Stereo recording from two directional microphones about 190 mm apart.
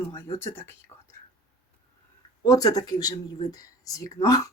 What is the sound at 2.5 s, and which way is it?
Speech, 20° left (ahead or behind).